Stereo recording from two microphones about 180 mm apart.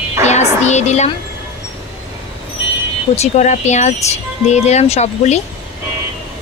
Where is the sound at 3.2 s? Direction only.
40° left (ahead or behind).